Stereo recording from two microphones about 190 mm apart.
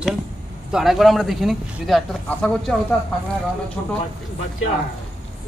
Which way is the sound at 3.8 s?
15° left (ahead or behind).